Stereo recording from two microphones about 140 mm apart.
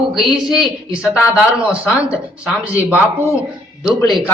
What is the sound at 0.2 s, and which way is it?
Speech, 5° right (ahead or behind).